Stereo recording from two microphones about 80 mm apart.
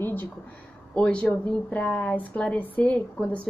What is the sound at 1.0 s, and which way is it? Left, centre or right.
A woman's voice, centre.